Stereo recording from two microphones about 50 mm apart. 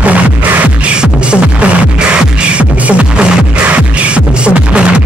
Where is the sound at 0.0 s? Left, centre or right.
Right.